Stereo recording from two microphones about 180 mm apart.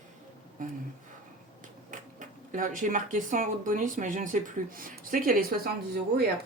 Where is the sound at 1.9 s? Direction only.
45° right (ahead or behind).